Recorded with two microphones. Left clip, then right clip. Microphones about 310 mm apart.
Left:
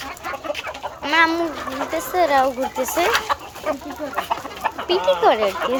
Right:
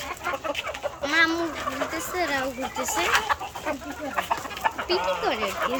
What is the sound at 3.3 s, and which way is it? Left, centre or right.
Chicken, left.